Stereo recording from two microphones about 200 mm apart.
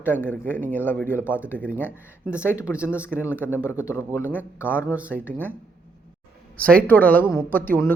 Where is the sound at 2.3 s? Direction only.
10° left (ahead or behind).